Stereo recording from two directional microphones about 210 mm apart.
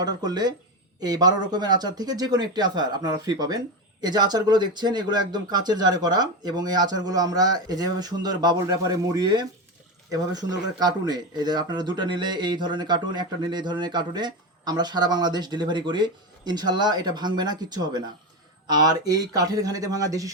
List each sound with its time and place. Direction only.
0.0 s speech: 20° right (ahead or behind)